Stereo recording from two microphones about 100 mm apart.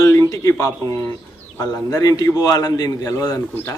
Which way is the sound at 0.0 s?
35° left (ahead or behind).